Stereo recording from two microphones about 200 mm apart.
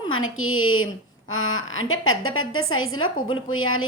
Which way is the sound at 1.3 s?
80° left.